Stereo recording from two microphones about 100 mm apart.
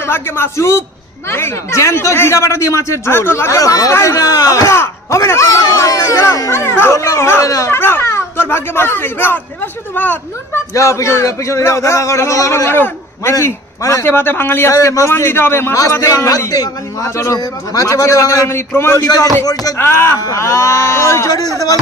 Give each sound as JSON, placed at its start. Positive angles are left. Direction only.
{"t": 0.0, "sound": "speech", "side_deg": 25}
{"t": 10.7, "sound": "a man's voice", "side_deg": 30}
{"t": 19.0, "sound": "a man's voice", "side_deg": 40}
{"t": 19.8, "sound": "a man's voice", "side_deg": 25}